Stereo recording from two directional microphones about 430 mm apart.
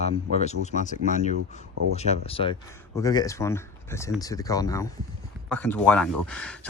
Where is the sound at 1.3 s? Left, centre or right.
Right.